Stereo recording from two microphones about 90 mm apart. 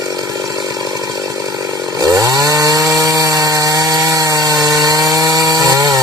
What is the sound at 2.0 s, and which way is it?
Chainsaw, 40° right (ahead or behind).